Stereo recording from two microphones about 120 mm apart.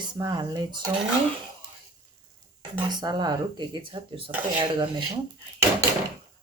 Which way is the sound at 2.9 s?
35° right (ahead or behind).